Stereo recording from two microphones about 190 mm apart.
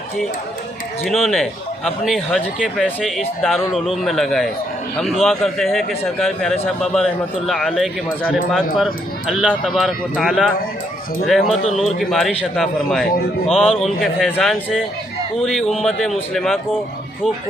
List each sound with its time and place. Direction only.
1.0 s speech: centre (ahead or behind)
11.5 s a man's voice: 35° left (ahead or behind)
11.8 s speech: centre (ahead or behind)